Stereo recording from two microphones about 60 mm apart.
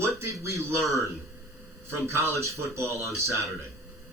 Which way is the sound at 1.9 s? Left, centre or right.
Right.